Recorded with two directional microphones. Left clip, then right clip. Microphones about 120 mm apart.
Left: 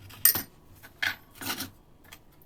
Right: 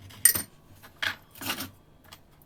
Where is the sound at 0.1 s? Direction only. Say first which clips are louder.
Right 2 dB; 10° left (ahead or behind).